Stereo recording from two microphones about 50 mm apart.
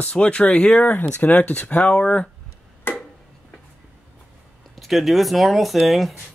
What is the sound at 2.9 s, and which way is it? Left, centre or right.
Tick-tock, left.